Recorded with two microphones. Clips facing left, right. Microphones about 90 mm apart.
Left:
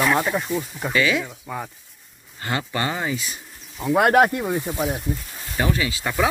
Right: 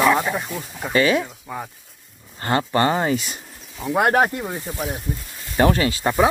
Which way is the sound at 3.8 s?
Centre (ahead or behind).